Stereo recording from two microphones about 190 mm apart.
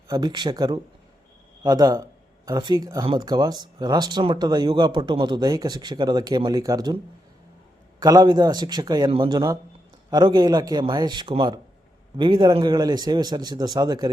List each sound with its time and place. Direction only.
0.1 s speech: 20° right (ahead or behind)
7.9 s speech: 20° right (ahead or behind)